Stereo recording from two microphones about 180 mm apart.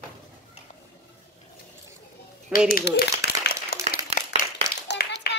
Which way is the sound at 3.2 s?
60° left (ahead or behind).